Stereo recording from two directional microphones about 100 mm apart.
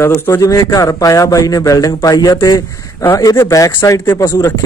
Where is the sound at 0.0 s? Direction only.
25° left (ahead or behind).